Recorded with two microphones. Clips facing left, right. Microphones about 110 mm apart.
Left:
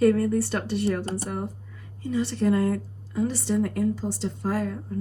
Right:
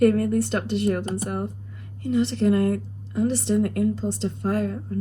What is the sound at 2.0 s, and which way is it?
A woman's voice, 70° right (ahead or behind).